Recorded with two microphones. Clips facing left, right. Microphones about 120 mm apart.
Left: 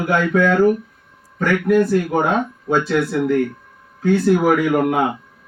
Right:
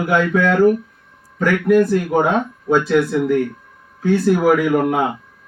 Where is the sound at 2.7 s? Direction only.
10° right (ahead or behind).